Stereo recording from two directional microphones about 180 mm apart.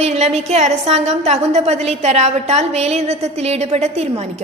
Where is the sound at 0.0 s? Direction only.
35° right (ahead or behind).